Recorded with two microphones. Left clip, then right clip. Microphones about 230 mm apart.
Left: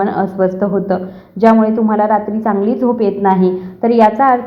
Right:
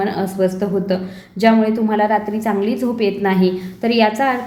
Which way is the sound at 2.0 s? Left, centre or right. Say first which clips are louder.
Left 4 dB; centre.